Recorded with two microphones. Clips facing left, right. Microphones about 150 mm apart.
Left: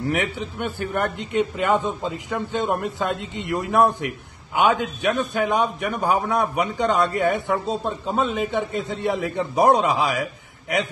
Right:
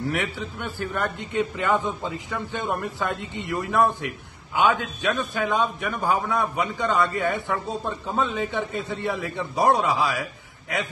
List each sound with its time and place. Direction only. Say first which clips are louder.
0.1 s a man's voice: left 3 dB; 20° left (ahead or behind)